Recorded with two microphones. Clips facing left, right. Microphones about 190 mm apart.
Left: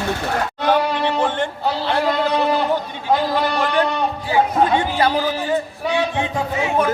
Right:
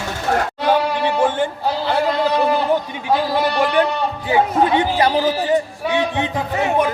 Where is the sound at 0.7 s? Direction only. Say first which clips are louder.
Even; 10° right (ahead or behind).